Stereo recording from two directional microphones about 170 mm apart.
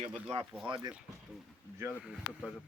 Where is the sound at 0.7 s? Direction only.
30° right (ahead or behind).